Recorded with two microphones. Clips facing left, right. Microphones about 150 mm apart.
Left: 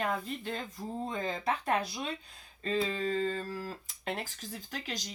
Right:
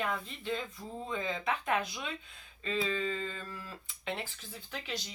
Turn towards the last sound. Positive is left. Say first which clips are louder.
# left 1 dB
turn(degrees=40)  # may be behind; listen again after turning